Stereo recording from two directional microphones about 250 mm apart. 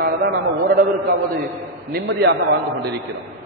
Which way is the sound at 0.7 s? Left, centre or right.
Right.